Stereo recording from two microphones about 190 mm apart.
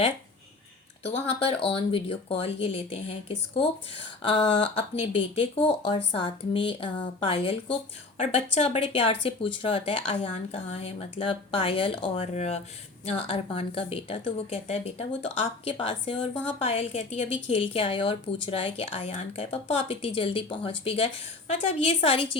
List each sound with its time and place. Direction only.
1.0 s speech: 30° left (ahead or behind)